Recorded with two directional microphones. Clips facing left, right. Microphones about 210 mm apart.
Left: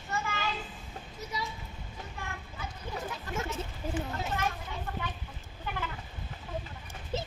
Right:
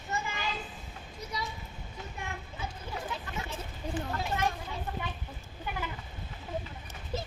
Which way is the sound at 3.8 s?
5° left (ahead or behind).